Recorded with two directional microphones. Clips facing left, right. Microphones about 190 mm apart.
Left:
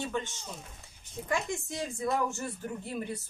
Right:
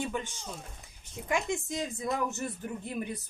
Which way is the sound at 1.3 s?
20° right (ahead or behind).